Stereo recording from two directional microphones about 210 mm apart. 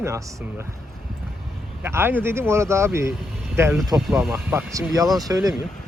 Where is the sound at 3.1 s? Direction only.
Centre (ahead or behind).